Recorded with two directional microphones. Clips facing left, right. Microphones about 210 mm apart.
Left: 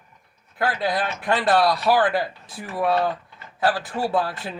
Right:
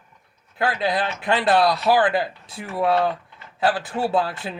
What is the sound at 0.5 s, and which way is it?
Speech, 25° right (ahead or behind).